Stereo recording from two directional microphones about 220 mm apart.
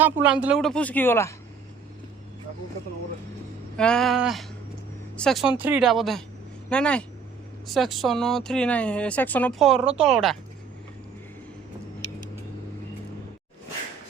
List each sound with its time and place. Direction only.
0.0 s speech: 5° right (ahead or behind); by 1.3 s 10° left (ahead or behind)
3.8 s speech: 5° left (ahead or behind)